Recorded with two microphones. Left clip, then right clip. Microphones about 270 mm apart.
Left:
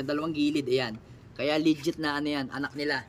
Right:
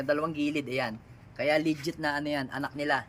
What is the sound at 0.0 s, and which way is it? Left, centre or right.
Speech, centre.